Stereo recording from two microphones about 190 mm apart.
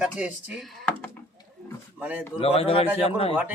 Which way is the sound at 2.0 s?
10° right (ahead or behind).